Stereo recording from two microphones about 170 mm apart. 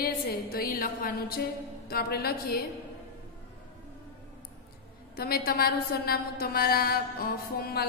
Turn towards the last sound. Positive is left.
turn(degrees=65)  # may be behind; listen again after turning